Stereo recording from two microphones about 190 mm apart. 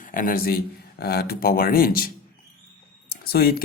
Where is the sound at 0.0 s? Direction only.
45° left (ahead or behind).